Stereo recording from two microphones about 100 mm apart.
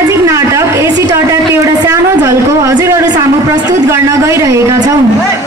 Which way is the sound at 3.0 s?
40° right (ahead or behind).